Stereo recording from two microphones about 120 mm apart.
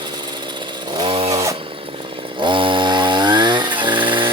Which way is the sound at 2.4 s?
45° right (ahead or behind).